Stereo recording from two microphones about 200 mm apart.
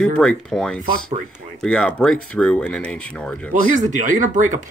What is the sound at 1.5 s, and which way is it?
Speech, 5° left (ahead or behind).